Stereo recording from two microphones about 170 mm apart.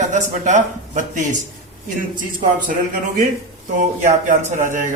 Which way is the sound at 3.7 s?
50° right (ahead or behind).